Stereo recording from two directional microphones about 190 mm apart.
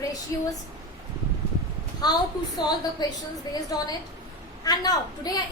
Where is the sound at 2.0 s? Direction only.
20° left (ahead or behind).